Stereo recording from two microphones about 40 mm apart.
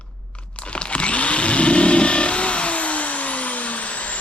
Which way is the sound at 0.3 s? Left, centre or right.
Left.